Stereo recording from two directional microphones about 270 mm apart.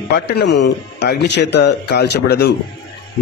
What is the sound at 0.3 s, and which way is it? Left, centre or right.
A man's voice, left.